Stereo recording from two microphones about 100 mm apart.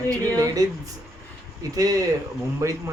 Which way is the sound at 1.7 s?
35° right (ahead or behind).